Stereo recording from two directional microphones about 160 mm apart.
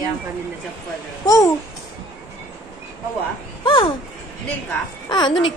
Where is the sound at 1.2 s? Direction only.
20° left (ahead or behind).